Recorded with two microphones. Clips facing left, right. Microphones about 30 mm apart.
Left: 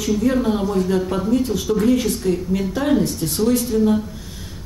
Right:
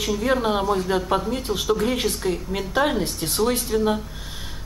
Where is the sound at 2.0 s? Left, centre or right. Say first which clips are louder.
Left 4 dB; centre.